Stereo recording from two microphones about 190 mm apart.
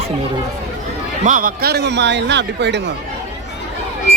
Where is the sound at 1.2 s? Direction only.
45° right (ahead or behind); by 2.9 s 65° right (ahead or behind).